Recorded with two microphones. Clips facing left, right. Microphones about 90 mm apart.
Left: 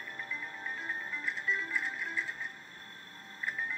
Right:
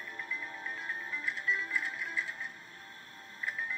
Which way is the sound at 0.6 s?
5° left (ahead or behind).